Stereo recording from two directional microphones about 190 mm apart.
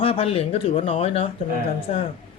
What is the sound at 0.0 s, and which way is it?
Speech, 30° left (ahead or behind).